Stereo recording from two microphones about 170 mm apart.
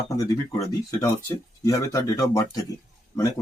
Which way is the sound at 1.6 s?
20° left (ahead or behind).